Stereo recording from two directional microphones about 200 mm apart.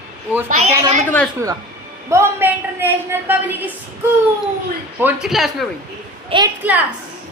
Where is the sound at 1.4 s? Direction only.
15° right (ahead or behind).